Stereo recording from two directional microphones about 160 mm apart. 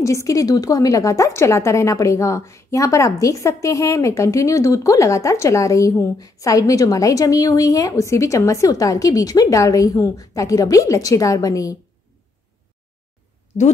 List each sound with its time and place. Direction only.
0.0 s a woman's voice: 20° left (ahead or behind)